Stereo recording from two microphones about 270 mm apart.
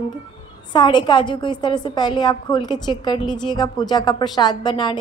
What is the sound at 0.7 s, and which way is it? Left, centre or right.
A woman's voice, centre.